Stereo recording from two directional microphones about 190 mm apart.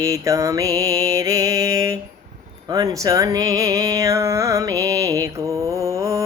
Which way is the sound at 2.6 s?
20° right (ahead or behind).